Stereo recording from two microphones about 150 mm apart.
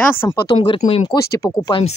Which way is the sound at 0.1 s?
15° left (ahead or behind).